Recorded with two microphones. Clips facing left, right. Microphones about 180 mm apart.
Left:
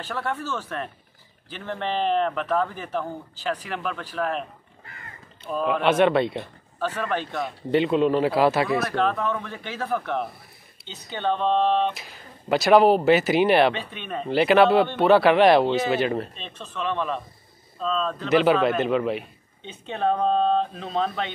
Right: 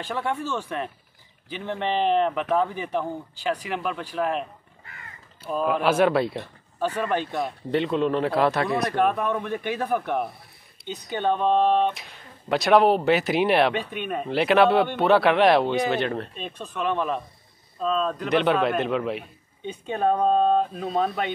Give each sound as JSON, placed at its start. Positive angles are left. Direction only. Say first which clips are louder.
{"t": 0.0, "sound": "speech", "louder": "right 2 dB", "side_deg": -10}
{"t": 7.3, "sound": "speech", "louder": "left 2 dB", "side_deg": 0}
{"t": 8.9, "sound": "speech", "louder": "right 1 dB", "side_deg": -15}
{"t": 11.9, "sound": "speech", "louder": "even", "side_deg": 0}
{"t": 16.3, "sound": "speech", "louder": "right 2 dB", "side_deg": -10}
{"t": 18.3, "sound": "speech", "louder": "left 3 dB", "side_deg": 0}
{"t": 19.7, "sound": "speech", "louder": "right 1 dB", "side_deg": -10}